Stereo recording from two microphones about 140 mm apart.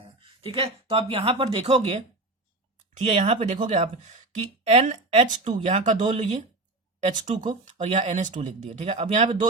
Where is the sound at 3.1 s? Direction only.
50° right (ahead or behind).